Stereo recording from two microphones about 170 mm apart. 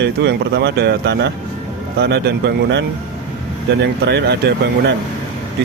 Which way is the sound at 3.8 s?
80° right.